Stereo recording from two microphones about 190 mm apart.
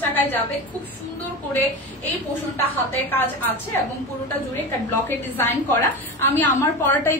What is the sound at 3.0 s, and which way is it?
Speech, 10° left (ahead or behind).